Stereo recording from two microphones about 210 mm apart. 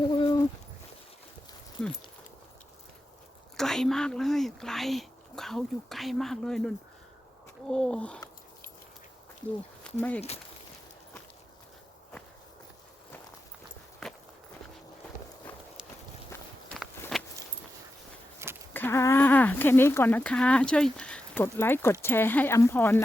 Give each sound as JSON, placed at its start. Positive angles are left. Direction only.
{"t": 0.1, "sound": "a sound", "side_deg": 20}
{"t": 3.6, "sound": "speech", "side_deg": 0}
{"t": 10.2, "sound": "speech", "side_deg": 30}
{"t": 14.0, "sound": "walk", "side_deg": 0}
{"t": 16.3, "sound": "walk", "side_deg": 5}
{"t": 18.7, "sound": "speech", "side_deg": 10}